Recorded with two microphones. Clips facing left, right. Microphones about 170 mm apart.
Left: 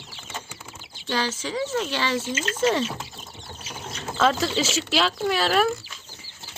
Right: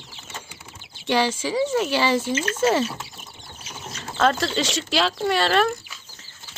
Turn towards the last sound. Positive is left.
turn(degrees=0)  # may be behind; listen again after turning